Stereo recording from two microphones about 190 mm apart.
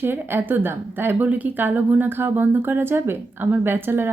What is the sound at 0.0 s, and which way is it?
Speech, 10° right (ahead or behind).